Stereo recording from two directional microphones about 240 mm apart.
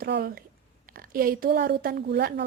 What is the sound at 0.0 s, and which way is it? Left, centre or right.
A woman's voice, right.